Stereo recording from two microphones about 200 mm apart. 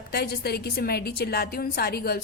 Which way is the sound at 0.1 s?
55° left (ahead or behind).